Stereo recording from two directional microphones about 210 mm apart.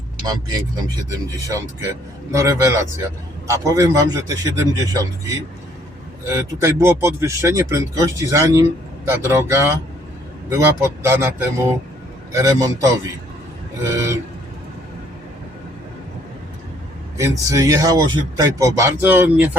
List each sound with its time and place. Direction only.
1.5 s speech: 15° right (ahead or behind)
17.2 s speech: 15° right (ahead or behind)